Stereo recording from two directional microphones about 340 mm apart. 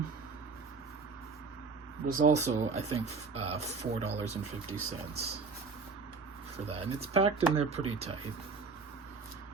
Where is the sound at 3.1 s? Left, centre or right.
Right.